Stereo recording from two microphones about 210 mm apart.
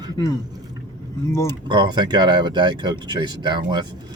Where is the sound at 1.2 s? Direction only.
15° left (ahead or behind).